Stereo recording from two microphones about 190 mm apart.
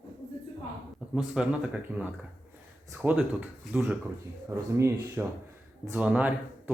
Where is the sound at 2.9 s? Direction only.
5° right (ahead or behind).